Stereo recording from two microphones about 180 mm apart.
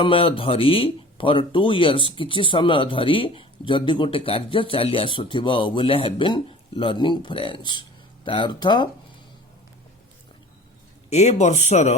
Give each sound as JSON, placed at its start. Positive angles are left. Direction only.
{"t": 0.0, "sound": "speech", "side_deg": 30}
{"t": 11.1, "sound": "speech", "side_deg": 40}